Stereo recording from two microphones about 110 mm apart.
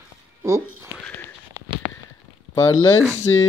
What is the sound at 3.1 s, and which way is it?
Speech, 20° left (ahead or behind).